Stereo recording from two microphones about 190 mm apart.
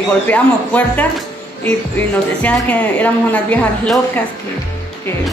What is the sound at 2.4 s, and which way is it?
Speech, 5° left (ahead or behind).